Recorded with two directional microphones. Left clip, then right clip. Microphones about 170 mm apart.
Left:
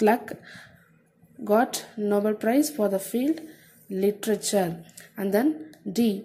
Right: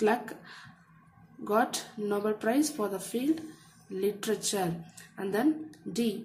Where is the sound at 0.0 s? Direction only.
25° left (ahead or behind).